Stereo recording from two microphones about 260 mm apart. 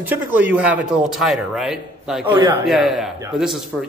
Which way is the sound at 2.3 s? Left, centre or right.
Centre.